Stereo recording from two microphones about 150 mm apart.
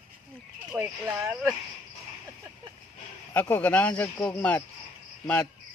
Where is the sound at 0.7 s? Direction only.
10° right (ahead or behind).